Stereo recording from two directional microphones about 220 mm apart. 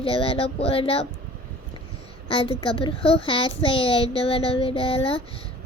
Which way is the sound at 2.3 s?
25° left (ahead or behind).